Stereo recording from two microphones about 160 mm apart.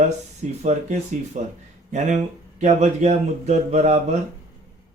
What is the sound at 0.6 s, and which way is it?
A man's voice, 45° right (ahead or behind).